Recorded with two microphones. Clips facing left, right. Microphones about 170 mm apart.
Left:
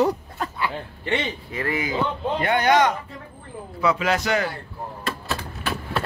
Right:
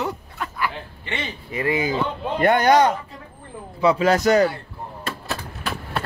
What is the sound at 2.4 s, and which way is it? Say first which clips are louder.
Speech: right 4 dB; 45° right (ahead or behind).